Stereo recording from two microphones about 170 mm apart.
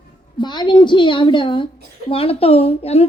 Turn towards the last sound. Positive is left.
turn(degrees=35)  # may be behind; listen again after turning